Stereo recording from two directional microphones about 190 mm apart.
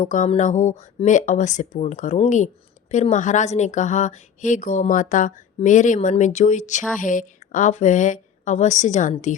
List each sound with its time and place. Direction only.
0.0 s a woman's voice: 40° left (ahead or behind)